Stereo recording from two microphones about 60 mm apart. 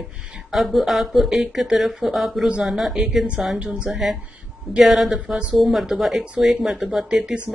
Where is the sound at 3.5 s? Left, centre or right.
Centre.